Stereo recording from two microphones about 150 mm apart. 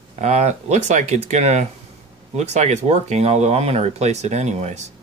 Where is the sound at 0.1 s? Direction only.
50° right (ahead or behind).